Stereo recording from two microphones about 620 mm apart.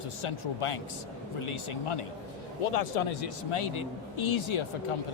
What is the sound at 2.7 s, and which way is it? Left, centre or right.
A man's voice, left.